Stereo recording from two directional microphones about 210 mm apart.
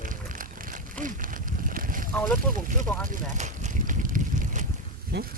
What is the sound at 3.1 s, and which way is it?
Boat, 35° right (ahead or behind).